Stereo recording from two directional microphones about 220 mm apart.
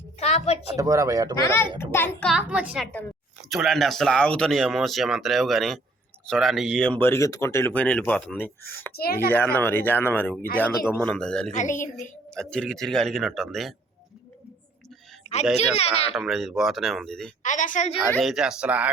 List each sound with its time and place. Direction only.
0.2 s a sound: 30° left (ahead or behind)
0.8 s speech: 15° right (ahead or behind)
1.4 s speech: 10° left (ahead or behind)
2.3 s speech: 5° right (ahead or behind)
8.9 s speech: 45° left (ahead or behind)
9.3 s speech: 10° left (ahead or behind)
11.5 s a woman's voice: 35° left (ahead or behind)
12.3 s speech: 5° left (ahead or behind)
15.2 s a sound: 30° left (ahead or behind)
15.5 s speech: 30° left (ahead or behind)
16.1 s speech: centre (ahead or behind)
17.4 s a woman's voice: 35° left (ahead or behind)
18.1 s speech: centre (ahead or behind)